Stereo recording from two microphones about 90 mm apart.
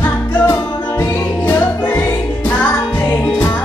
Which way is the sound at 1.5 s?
25° left (ahead or behind).